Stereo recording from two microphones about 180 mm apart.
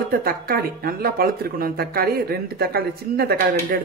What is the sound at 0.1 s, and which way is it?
Speech, 55° right (ahead or behind).